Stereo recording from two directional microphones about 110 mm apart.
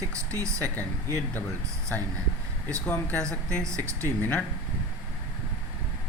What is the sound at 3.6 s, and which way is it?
Speech, 25° right (ahead or behind).